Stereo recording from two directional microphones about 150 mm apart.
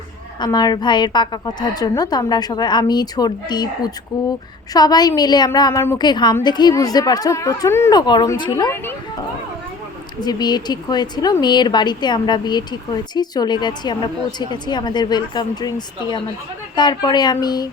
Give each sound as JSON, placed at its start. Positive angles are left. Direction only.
{"t": 0.3, "sound": "a woman's voice", "side_deg": 30}
{"t": 8.7, "sound": "speech", "side_deg": 15}
{"t": 10.2, "sound": "a woman's voice", "side_deg": 30}